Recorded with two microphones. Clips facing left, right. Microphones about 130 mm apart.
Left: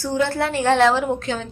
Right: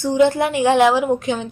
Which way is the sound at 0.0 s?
15° right (ahead or behind).